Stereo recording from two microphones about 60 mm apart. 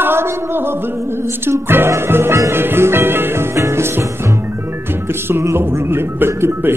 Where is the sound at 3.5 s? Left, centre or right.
Right.